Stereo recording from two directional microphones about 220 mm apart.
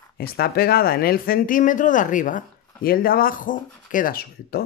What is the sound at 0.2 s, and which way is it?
Speech, 45° left (ahead or behind).